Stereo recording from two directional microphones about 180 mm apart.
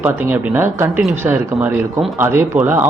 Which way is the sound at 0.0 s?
10° right (ahead or behind).